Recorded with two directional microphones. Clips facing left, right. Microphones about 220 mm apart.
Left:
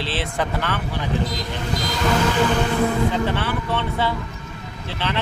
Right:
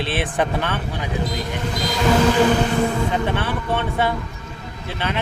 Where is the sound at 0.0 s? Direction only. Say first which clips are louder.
Right 3 dB; 20° right (ahead or behind).